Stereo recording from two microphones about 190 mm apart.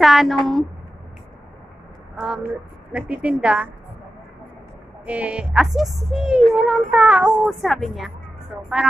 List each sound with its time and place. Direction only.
0.0 s speech: centre (ahead or behind)
2.1 s a woman's voice: 5° right (ahead or behind)
5.0 s speech: 5° right (ahead or behind)